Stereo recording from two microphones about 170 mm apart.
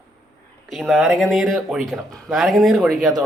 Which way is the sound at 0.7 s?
Centre (ahead or behind).